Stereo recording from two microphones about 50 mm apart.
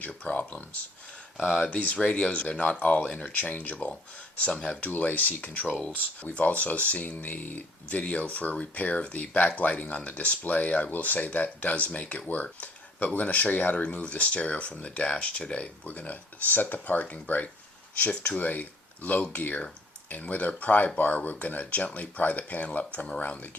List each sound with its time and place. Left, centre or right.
0.3 s speech: left
4.9 s speech: left